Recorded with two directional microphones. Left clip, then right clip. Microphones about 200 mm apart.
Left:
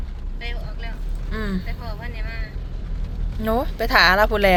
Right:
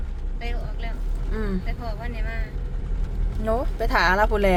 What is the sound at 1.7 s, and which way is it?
Speech, 25° right (ahead or behind).